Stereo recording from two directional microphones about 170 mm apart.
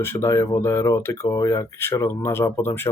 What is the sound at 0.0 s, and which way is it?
Speech, 15° left (ahead or behind).